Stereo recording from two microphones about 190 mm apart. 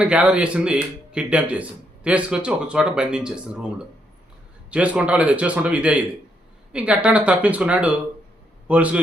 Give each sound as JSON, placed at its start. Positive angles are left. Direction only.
{"t": 0.0, "sound": "speech", "side_deg": -5}
{"t": 4.7, "sound": "a man's voice", "side_deg": -5}